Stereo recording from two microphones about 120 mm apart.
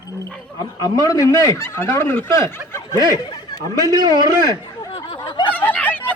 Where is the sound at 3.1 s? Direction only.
35° left (ahead or behind).